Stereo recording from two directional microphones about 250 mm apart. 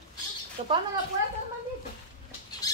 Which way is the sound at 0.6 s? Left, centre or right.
Right.